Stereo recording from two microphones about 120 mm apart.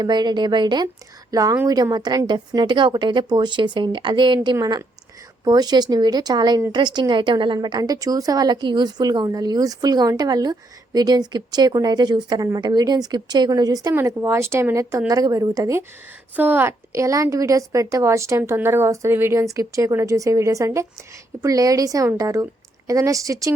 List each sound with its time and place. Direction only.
0.0 s a woman's voice: 35° right (ahead or behind)
5.5 s a woman's voice: 35° right (ahead or behind)
13.9 s a woman's voice: 20° right (ahead or behind)
16.3 s a woman's voice: 15° right (ahead or behind)